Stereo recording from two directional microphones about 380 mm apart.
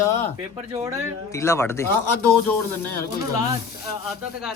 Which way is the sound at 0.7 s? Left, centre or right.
Centre.